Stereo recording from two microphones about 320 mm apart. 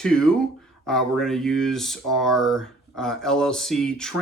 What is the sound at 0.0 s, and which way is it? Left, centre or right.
Speech, centre.